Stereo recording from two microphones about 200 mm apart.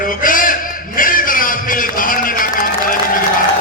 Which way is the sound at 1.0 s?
45° left (ahead or behind).